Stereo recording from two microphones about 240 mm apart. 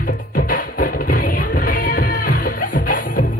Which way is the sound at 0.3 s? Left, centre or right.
Left.